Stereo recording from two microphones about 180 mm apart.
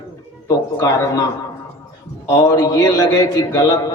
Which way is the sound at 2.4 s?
15° left (ahead or behind).